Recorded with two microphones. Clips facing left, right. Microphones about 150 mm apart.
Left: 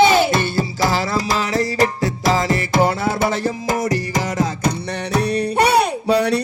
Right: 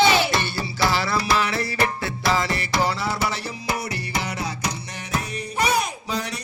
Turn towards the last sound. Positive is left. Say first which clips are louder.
# left 13 dB
turn(degrees=65)  # may be behind; listen again after turning